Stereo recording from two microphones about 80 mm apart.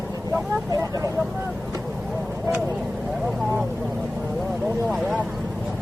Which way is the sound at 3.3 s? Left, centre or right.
Centre.